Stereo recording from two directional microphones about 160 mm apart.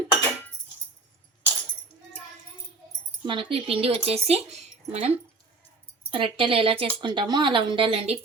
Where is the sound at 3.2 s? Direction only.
35° right (ahead or behind).